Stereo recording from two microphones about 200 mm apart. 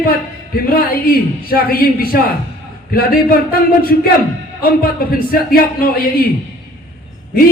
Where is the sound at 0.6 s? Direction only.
50° left (ahead or behind).